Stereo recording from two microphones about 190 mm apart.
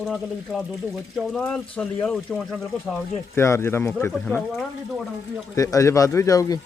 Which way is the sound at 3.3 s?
15° left (ahead or behind).